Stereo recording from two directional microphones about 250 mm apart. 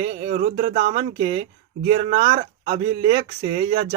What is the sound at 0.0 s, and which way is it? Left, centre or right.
Speech, right.